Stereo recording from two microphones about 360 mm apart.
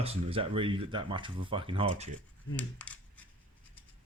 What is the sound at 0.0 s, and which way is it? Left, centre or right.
Speech, centre.